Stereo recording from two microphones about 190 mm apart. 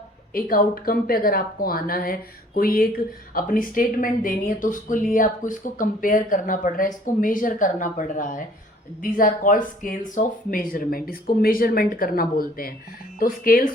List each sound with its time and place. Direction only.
0.3 s speech: 50° left (ahead or behind)